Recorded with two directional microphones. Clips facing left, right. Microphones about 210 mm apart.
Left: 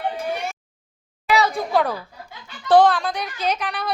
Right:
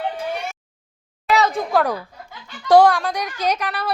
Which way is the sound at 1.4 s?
5° left (ahead or behind).